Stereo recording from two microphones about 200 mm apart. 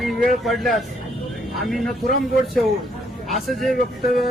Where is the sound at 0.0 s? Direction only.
Centre (ahead or behind).